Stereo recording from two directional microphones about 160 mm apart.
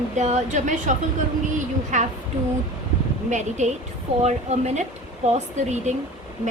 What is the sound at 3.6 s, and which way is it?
Speech, 45° right (ahead or behind).